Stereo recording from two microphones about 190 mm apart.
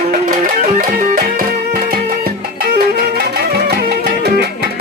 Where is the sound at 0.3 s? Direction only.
45° right (ahead or behind).